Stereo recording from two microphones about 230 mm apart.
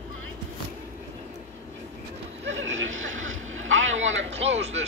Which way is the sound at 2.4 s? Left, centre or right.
Right.